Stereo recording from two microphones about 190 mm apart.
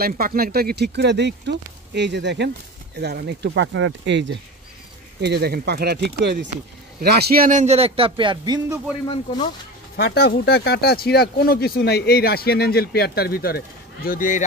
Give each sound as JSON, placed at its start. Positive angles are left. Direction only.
{"t": 0.0, "sound": "speech", "side_deg": -50}
{"t": 5.2, "sound": "speech", "side_deg": -60}
{"t": 9.9, "sound": "speech", "side_deg": 55}